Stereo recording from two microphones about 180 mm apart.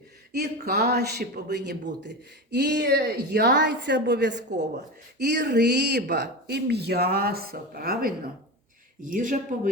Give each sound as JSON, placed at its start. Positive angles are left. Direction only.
{"t": 0.3, "sound": "speech", "side_deg": -60}